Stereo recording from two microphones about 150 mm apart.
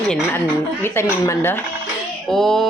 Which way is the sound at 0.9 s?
15° left (ahead or behind).